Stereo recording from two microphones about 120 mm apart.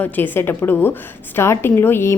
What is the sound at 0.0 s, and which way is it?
A woman's voice, 15° left (ahead or behind).